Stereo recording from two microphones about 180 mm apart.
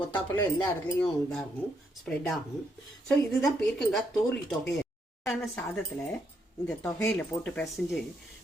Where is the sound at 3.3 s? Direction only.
5° left (ahead or behind).